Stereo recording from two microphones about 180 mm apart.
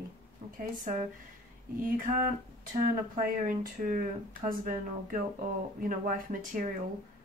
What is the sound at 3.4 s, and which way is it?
Speech, 50° right (ahead or behind).